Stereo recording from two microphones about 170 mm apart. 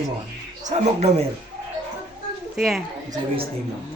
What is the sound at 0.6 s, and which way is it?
Speech, 40° right (ahead or behind).